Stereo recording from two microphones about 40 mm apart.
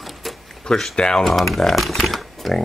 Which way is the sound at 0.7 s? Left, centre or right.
Left.